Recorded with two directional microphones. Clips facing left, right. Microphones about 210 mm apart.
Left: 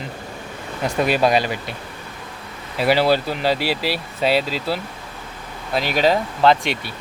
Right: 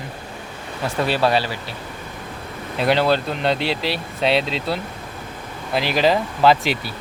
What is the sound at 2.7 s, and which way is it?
Speech, 5° left (ahead or behind).